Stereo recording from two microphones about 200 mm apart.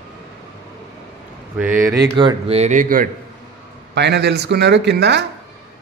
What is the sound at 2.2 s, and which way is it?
Speech, 25° right (ahead or behind).